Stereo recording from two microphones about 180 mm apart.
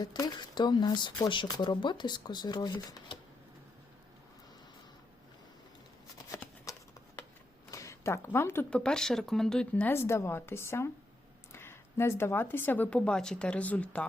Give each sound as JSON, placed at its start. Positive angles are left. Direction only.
{"t": 0.0, "sound": "speech", "side_deg": 20}
{"t": 6.7, "sound": "shuffling cards", "side_deg": 20}
{"t": 7.7, "sound": "speech", "side_deg": 15}